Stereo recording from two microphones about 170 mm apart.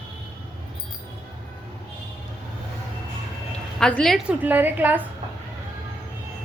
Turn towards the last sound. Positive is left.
turn(degrees=-10)  # may be behind; listen again after turning